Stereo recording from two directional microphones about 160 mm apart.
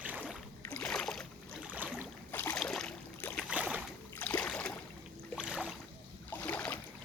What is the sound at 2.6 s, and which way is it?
Boat, 5° left (ahead or behind).